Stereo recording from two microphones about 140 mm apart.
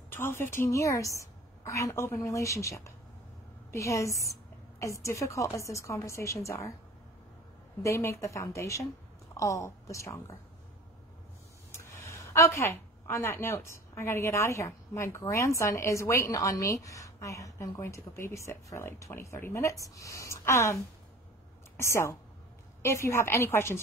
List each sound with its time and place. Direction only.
0.1 s a woman's voice: 15° left (ahead or behind)
7.8 s a woman's voice: 20° left (ahead or behind)
11.7 s a woman's voice: 20° left (ahead or behind)